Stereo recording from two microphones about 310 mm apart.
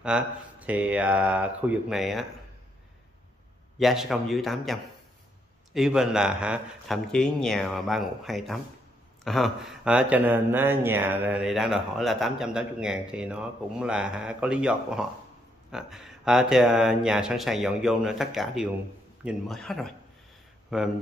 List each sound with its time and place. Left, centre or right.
0.0 s speech: centre
3.7 s speech: centre